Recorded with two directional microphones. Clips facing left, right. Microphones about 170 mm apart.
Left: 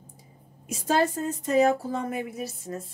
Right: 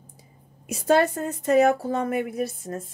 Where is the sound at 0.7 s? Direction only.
65° right (ahead or behind).